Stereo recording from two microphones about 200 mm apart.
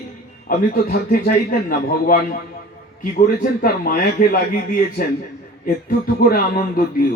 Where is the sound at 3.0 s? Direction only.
45° left (ahead or behind).